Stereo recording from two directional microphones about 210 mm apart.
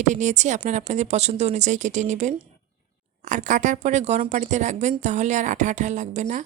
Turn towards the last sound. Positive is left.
turn(degrees=-35)  # may be behind; listen again after turning